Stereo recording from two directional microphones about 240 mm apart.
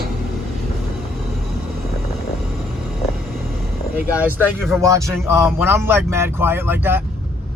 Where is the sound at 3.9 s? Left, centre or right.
Centre.